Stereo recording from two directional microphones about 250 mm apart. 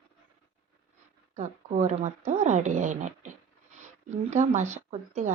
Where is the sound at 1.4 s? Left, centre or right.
Right.